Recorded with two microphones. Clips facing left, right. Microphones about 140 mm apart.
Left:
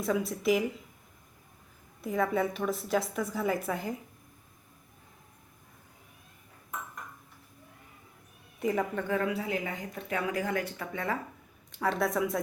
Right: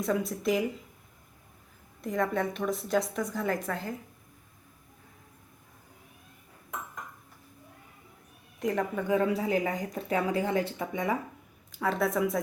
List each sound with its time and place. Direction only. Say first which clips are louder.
0.0 s a woman's voice: even; centre (ahead or behind)
2.0 s a woman's voice: left 1 dB; 5° left (ahead or behind)
8.5 s speech: even; 5° left (ahead or behind)
9.0 s speech: right 4 dB; 15° right (ahead or behind)
9.2 s speech: right 4 dB; 35° right (ahead or behind); by 11.2 s 15° right (ahead or behind)
11.7 s a woman's voice: right 1 dB; centre (ahead or behind)